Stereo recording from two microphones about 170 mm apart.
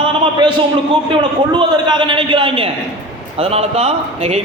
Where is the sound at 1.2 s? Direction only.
25° right (ahead or behind).